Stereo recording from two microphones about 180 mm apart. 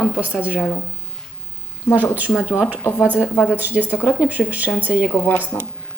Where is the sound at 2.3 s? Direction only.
5° right (ahead or behind).